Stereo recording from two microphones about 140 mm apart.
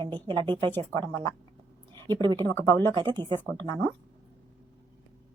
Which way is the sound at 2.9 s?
30° right (ahead or behind).